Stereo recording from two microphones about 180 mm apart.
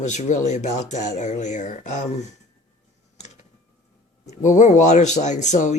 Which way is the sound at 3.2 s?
40° left (ahead or behind).